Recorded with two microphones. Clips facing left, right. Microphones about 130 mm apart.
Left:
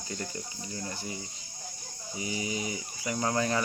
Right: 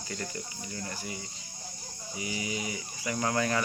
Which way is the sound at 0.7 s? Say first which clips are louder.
Left 1 dB; 25° left (ahead or behind).